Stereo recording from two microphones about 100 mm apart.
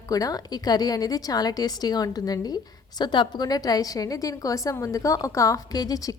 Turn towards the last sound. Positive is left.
turn(degrees=35)  # may be behind; listen again after turning